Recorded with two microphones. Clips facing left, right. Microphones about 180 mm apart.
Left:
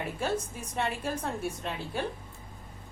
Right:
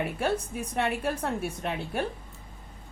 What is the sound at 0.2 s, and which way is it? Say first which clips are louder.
A woman's voice: right 3 dB; 60° right (ahead or behind).